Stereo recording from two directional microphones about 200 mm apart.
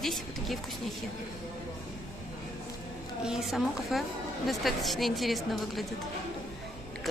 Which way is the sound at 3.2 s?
Centre (ahead or behind).